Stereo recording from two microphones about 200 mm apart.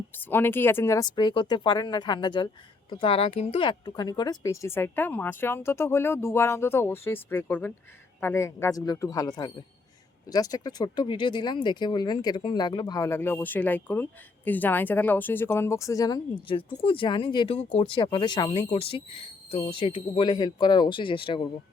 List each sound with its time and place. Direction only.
0.1 s speech: 10° left (ahead or behind); by 21.4 s 25° left (ahead or behind)